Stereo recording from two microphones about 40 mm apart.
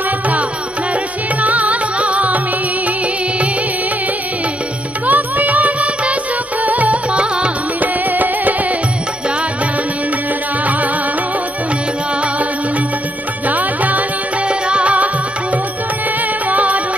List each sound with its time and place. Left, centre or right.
1.4 s music: right
5.0 s music: right
7.2 s music: right
7.8 s music: right
10.6 s music: right
13.5 s music: right
14.5 s music: right
16.4 s music: right